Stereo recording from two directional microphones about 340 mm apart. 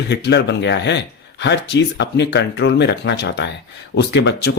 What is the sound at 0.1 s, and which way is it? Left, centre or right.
Speech, left.